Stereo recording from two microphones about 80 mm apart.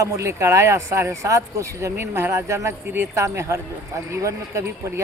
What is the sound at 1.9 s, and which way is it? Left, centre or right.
A man's voice, right.